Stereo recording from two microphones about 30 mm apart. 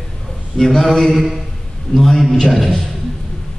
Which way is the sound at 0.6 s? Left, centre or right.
Centre.